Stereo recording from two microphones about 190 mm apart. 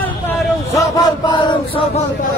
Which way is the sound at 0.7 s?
20° left (ahead or behind).